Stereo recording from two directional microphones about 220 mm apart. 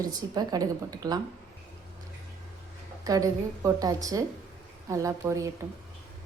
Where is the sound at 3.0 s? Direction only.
15° right (ahead or behind).